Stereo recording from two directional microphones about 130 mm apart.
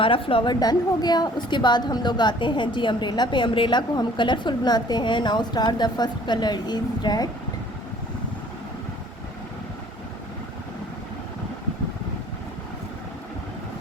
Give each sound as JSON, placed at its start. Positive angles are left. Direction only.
{"t": 0.0, "sound": "a woman's voice", "side_deg": 45}